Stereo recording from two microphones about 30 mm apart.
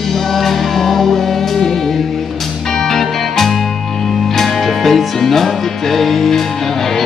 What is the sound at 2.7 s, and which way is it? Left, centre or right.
Music, centre.